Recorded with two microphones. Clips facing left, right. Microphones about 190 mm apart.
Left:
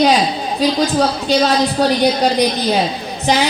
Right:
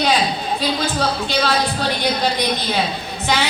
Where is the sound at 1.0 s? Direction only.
40° left (ahead or behind).